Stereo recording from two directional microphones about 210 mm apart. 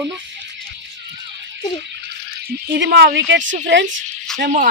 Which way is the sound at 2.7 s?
55° right (ahead or behind).